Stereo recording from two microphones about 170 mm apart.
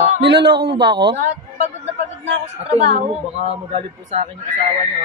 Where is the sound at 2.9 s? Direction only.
40° right (ahead or behind).